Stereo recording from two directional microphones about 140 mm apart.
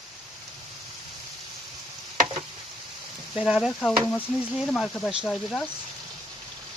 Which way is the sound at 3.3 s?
5° right (ahead or behind).